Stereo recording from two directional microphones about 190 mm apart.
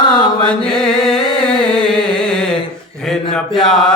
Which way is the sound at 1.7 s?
5° left (ahead or behind).